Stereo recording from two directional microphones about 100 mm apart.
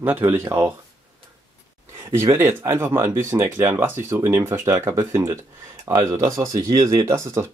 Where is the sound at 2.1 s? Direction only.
25° right (ahead or behind).